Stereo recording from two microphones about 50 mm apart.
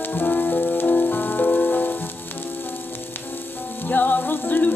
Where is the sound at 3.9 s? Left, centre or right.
Left.